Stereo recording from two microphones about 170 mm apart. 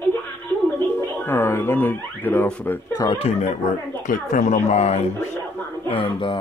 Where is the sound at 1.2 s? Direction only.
10° left (ahead or behind).